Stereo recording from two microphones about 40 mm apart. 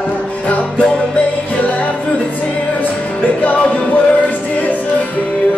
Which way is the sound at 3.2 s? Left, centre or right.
Left.